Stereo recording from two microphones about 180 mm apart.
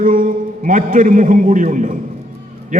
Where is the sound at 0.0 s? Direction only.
50° right (ahead or behind).